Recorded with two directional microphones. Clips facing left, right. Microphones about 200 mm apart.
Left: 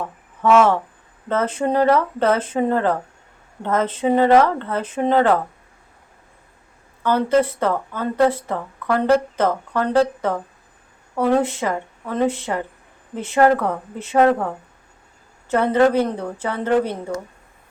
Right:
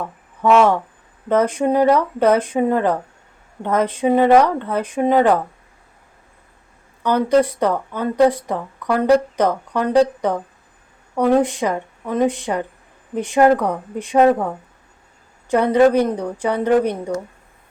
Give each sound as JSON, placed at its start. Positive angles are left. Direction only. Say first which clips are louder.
{"t": 0.4, "sound": "speech", "louder": "right 1 dB", "side_deg": -15}
{"t": 7.0, "sound": "speech", "louder": "right 2 dB", "side_deg": -15}